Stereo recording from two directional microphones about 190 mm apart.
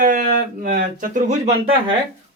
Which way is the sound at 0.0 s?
45° right (ahead or behind).